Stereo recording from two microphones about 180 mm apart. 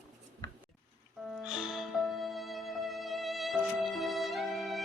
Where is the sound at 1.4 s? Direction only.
5° right (ahead or behind).